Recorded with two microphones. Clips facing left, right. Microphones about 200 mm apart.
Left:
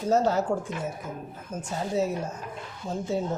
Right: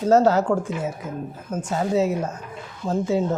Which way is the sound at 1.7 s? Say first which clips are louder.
Right 6 dB; 90° right.